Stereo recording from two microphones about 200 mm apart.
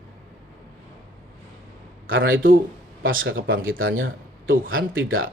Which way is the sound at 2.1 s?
75° right (ahead or behind).